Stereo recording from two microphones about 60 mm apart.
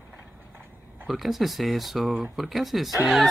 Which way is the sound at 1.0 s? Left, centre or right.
Centre.